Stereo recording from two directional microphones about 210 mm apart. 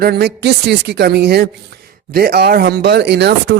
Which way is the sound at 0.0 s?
50° right (ahead or behind).